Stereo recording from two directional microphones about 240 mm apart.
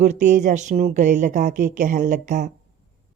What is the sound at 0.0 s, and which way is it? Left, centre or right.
Speech, right.